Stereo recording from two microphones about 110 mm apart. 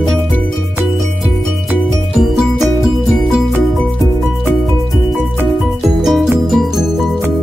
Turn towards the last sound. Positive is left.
turn(degrees=0)  # may be behind; listen again after turning